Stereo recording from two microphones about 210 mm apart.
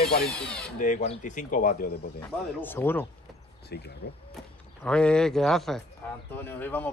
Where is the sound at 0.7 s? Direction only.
40° left (ahead or behind).